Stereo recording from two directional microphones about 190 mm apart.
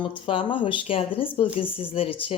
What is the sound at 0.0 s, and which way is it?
Speech, 25° left (ahead or behind).